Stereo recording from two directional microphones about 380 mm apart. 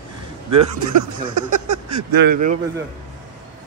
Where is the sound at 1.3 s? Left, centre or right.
Right.